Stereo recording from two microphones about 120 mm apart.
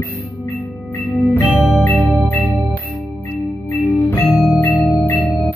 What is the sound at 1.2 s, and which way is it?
Music, 5° right (ahead or behind).